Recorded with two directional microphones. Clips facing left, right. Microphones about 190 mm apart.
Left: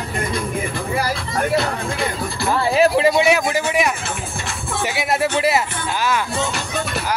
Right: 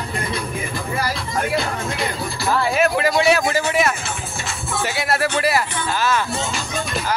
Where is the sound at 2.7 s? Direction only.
30° left (ahead or behind).